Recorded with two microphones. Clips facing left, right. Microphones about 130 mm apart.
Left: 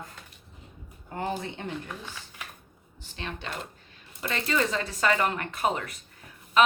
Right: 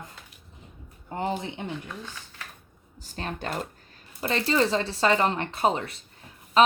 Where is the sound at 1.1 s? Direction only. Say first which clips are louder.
Right 2 dB; 20° right (ahead or behind).